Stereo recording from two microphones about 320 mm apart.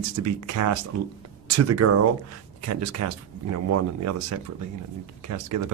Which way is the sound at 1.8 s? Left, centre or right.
Right.